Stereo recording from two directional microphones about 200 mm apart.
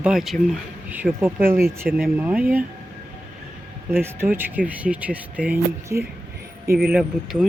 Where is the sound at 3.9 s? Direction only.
10° right (ahead or behind).